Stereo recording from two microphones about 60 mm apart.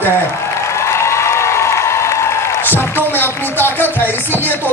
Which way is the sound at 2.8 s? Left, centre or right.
Left.